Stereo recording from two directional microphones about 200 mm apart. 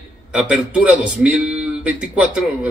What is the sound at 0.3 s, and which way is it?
A man's voice, 5° right (ahead or behind).